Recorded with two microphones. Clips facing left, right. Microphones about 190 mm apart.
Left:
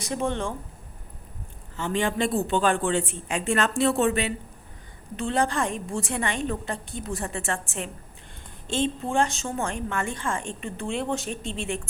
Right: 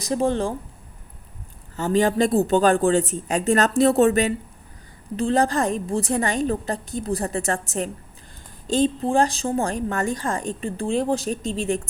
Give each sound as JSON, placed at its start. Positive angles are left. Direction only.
{"t": 0.0, "sound": "a woman's voice", "side_deg": -35}
{"t": 1.7, "sound": "a woman's voice", "side_deg": -40}